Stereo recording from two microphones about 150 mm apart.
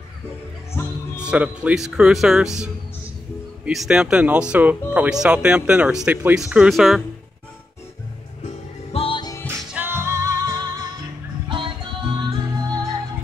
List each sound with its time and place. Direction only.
0.8 s speech: 15° left (ahead or behind)
1.2 s speech: 5° right (ahead or behind)
8.5 s music: 40° left (ahead or behind)
9.6 s music: 5° right (ahead or behind)
9.8 s music: 15° right (ahead or behind)